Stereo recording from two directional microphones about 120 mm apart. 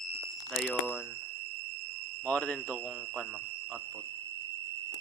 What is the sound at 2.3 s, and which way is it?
Speech, 10° left (ahead or behind).